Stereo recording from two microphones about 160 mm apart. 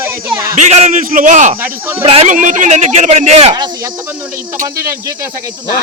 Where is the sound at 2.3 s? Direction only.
55° right (ahead or behind).